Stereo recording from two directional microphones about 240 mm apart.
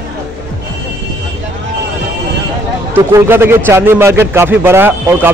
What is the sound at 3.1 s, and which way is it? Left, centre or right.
Speech, centre.